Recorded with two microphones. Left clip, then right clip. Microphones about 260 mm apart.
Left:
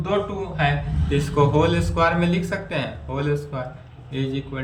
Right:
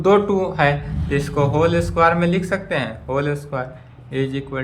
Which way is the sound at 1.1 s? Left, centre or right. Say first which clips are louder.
Even; centre.